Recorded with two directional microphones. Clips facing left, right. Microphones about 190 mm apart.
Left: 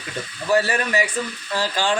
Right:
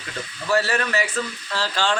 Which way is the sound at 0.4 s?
15° left (ahead or behind).